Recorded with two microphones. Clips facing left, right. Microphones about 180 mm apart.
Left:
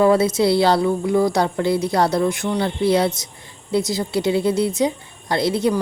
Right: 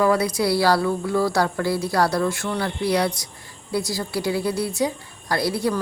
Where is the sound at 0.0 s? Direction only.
25° left (ahead or behind).